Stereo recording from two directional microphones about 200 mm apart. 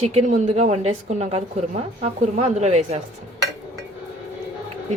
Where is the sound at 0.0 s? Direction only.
30° right (ahead or behind).